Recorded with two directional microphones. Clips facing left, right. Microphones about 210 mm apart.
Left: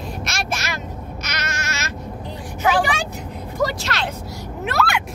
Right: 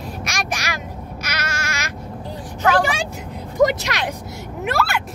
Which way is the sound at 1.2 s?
10° right (ahead or behind).